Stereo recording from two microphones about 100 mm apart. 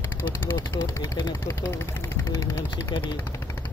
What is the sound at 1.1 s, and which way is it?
Speech, 40° left (ahead or behind).